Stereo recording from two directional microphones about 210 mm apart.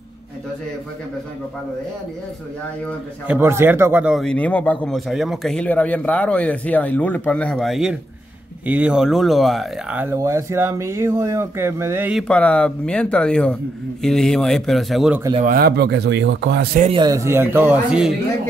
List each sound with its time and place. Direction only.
3.3 s speech: 10° right (ahead or behind)
15.3 s a man's voice: 40° right (ahead or behind)
16.8 s speech: 20° right (ahead or behind); by 18.1 s 5° right (ahead or behind)